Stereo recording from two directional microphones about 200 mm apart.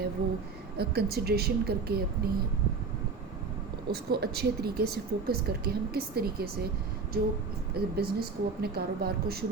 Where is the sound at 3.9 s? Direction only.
50° right (ahead or behind).